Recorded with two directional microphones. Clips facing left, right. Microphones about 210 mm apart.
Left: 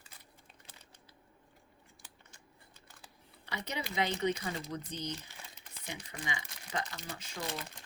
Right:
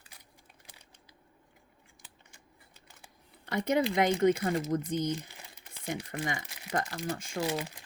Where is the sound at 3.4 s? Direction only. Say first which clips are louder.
Right 12 dB; 50° right (ahead or behind).